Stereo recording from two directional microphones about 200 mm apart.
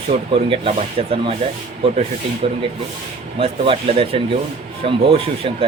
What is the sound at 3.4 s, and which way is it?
Speech, 30° right (ahead or behind).